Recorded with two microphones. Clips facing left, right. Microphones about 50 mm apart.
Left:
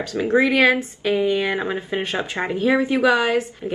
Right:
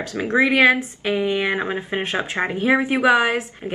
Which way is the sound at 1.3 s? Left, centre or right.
Right.